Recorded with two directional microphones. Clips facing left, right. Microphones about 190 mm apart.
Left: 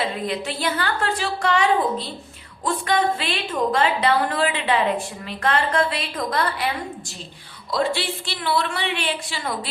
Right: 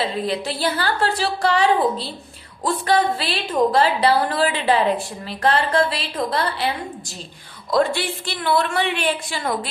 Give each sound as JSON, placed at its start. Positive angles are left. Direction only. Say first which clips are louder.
{"t": 0.3, "sound": "a woman's voice", "louder": "right 2 dB", "side_deg": -35}
{"t": 7.7, "sound": "a woman's voice", "louder": "right 4 dB", "side_deg": -50}